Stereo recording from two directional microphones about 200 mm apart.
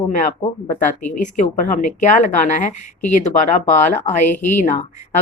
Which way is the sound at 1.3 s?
40° left (ahead or behind).